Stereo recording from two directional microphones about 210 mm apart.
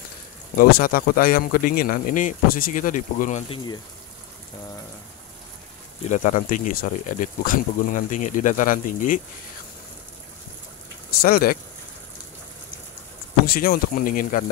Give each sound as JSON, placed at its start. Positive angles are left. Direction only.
{"t": 0.6, "sound": "speech", "side_deg": 45}
{"t": 6.0, "sound": "speech", "side_deg": 35}
{"t": 11.1, "sound": "speech", "side_deg": 45}
{"t": 13.5, "sound": "speech", "side_deg": 45}